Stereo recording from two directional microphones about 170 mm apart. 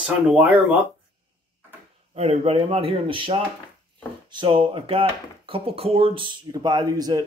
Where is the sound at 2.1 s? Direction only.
40° right (ahead or behind).